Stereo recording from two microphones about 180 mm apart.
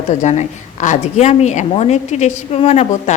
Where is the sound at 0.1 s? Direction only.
40° left (ahead or behind).